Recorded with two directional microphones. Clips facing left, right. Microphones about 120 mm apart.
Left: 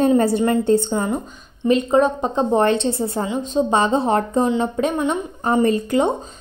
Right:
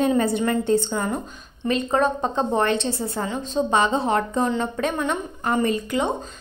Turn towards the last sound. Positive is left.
turn(degrees=30)  # may be behind; listen again after turning